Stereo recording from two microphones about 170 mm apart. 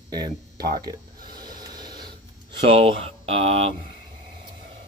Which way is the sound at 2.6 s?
35° right (ahead or behind).